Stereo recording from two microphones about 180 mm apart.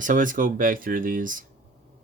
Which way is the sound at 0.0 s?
45° right (ahead or behind).